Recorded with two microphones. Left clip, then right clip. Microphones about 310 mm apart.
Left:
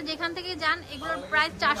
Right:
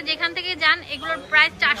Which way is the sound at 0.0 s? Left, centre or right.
Centre.